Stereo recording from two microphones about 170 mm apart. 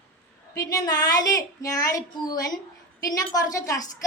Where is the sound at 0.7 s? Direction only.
20° left (ahead or behind).